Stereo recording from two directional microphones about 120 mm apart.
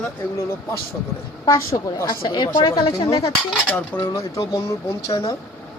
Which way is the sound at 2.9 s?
50° left (ahead or behind).